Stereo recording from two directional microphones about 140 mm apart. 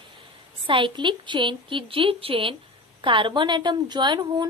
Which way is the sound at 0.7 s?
35° right (ahead or behind).